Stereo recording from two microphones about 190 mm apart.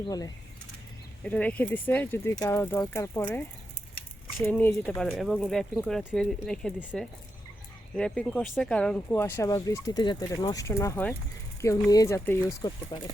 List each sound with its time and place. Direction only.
0.0 s speech: 20° left (ahead or behind)
1.2 s speech: 5° left (ahead or behind)
4.4 s speech: 10° left (ahead or behind)